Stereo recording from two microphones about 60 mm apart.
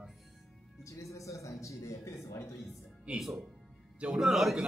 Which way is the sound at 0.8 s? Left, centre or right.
Left.